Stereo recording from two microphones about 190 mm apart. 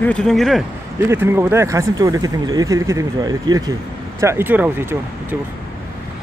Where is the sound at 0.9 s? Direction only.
15° right (ahead or behind).